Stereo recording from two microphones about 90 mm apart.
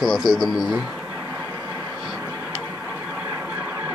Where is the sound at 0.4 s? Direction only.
5° right (ahead or behind).